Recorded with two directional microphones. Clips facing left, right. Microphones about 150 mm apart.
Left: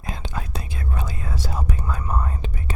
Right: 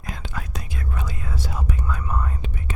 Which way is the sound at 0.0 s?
25° left (ahead or behind).